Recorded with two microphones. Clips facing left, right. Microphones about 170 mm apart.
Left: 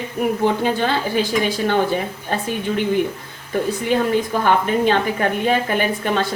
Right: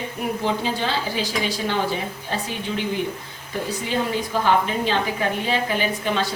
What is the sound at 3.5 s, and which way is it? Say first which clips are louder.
A woman's voice: left 6 dB; 55° left (ahead or behind).